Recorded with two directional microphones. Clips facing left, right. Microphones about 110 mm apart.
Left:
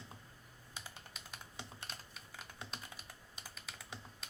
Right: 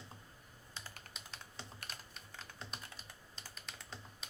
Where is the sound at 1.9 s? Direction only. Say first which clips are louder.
Even; 5° left (ahead or behind).